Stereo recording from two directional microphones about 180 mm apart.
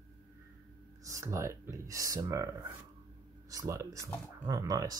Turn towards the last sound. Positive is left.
turn(degrees=-20)  # may be behind; listen again after turning